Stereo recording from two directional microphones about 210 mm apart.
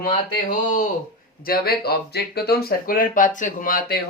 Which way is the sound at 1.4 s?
45° left (ahead or behind).